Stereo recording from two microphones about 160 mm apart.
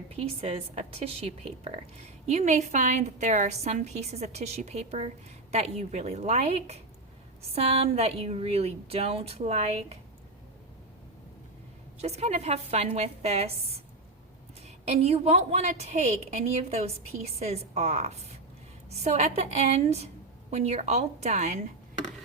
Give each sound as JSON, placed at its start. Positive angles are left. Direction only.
{"t": 0.2, "sound": "a woman's voice", "side_deg": -40}
{"t": 11.9, "sound": "speech", "side_deg": -40}
{"t": 14.8, "sound": "a woman's voice", "side_deg": -40}